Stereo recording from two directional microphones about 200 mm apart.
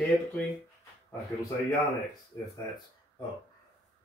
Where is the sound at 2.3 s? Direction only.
15° left (ahead or behind).